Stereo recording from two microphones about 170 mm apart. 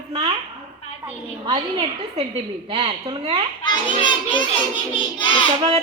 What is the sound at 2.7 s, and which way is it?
Speech, 30° right (ahead or behind).